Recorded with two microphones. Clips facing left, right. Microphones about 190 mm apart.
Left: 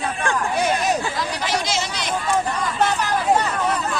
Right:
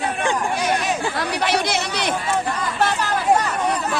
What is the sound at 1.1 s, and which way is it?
Speech, 65° right (ahead or behind).